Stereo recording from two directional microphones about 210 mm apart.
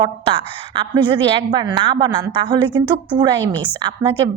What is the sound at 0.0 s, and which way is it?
A woman's voice, 25° right (ahead or behind).